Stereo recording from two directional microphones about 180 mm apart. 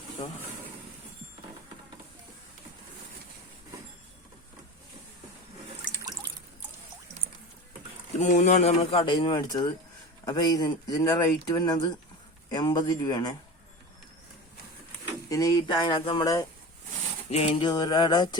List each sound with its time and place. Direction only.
8.2 s speech: 45° left (ahead or behind); by 13.3 s 20° left (ahead or behind)
15.3 s speech: 20° left (ahead or behind)
17.3 s speech: 35° left (ahead or behind)